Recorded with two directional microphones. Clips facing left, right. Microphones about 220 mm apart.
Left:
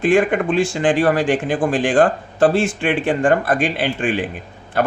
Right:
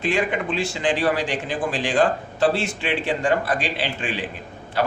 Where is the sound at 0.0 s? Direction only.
50° left (ahead or behind).